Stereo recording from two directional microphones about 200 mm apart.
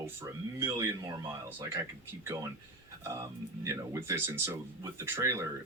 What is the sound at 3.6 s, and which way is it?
Speech, 15° right (ahead or behind).